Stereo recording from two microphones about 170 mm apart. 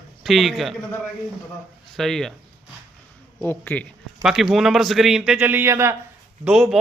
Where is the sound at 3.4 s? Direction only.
10° left (ahead or behind).